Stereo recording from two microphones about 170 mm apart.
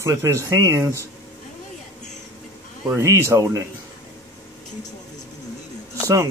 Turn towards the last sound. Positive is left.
turn(degrees=-15)  # may be behind; listen again after turning